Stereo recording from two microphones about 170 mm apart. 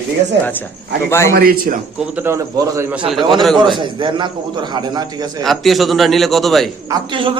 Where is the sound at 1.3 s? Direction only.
55° right (ahead or behind).